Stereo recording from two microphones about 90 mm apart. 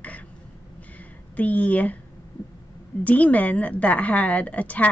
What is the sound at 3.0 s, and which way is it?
A woman's voice, 15° left (ahead or behind).